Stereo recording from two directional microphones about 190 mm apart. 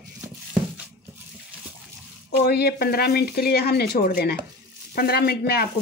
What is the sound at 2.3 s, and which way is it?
A woman's voice, 55° left (ahead or behind).